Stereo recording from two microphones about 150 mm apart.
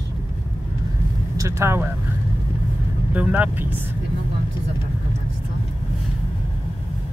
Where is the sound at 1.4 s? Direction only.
15° right (ahead or behind).